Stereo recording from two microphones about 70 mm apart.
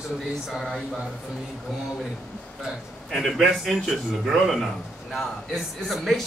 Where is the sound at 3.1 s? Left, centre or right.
Centre.